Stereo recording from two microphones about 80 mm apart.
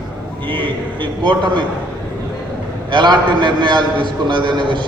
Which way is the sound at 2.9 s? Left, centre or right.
Right.